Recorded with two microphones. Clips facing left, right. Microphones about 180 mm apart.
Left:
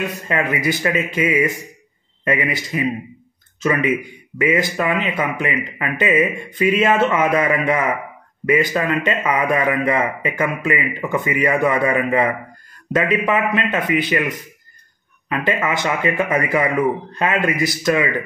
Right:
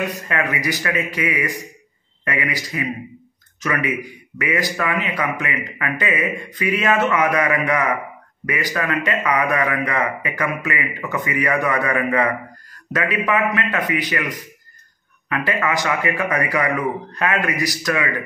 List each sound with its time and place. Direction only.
0.3 s a man's voice: 25° left (ahead or behind)